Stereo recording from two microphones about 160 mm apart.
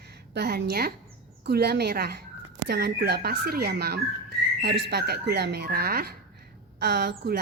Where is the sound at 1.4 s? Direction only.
85° right.